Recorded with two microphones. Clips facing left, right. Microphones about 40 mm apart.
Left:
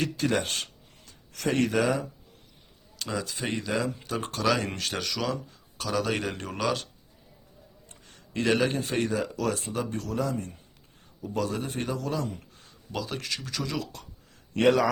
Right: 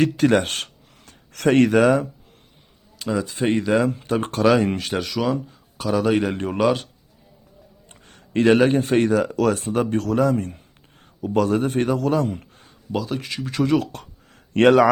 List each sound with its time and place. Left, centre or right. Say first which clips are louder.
0.0 s speech: right 9 dB; right
3.0 s a man's voice: right 8 dB; centre
3.3 s speech: right 11 dB; right
4.6 s a man's voice: right 8 dB; centre
6.3 s a man's voice: right 9 dB; right
7.9 s speech: right 4 dB; right
12.9 s speech: right 8 dB; centre
13.3 s a man's voice: right 5 dB; right
13.6 s speech: right 16 dB; right